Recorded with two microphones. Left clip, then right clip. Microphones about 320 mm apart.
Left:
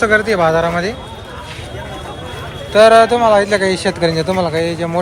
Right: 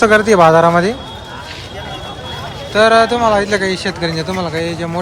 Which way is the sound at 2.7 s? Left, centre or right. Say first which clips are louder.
Left 2 dB; centre.